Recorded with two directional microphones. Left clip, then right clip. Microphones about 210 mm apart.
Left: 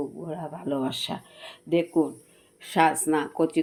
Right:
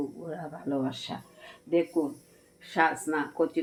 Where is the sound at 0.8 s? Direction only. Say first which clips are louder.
Left 5 dB; 40° left (ahead or behind).